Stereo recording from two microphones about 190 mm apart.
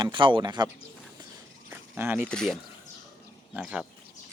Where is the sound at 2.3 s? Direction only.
5° left (ahead or behind).